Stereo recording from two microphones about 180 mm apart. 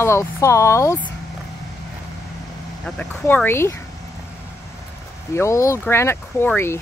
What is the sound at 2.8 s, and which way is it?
Speech, 10° left (ahead or behind).